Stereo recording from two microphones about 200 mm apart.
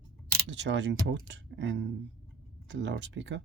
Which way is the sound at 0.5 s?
60° right (ahead or behind).